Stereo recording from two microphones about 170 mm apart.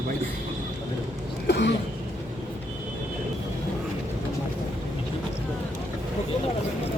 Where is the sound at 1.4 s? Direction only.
85° left.